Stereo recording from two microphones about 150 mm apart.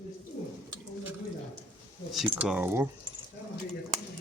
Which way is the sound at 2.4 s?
10° right (ahead or behind).